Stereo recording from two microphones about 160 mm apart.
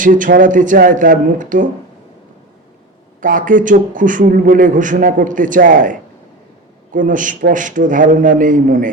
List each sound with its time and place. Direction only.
0.0 s a man's voice: 55° right (ahead or behind)
3.2 s a man's voice: 55° right (ahead or behind)